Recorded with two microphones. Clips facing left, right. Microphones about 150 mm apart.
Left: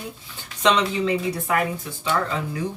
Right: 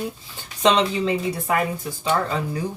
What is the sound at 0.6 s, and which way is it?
Speech, 30° right (ahead or behind).